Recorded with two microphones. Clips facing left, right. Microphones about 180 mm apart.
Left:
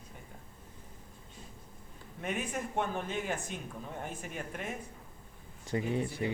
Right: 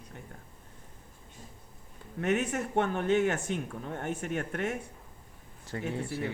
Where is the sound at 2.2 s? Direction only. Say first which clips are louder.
Right 7 dB; 75° right (ahead or behind).